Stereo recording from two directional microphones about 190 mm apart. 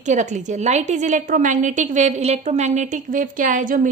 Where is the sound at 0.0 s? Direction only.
40° right (ahead or behind).